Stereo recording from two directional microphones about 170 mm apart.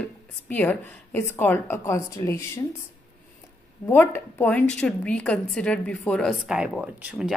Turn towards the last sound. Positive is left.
turn(degrees=-5)  # may be behind; listen again after turning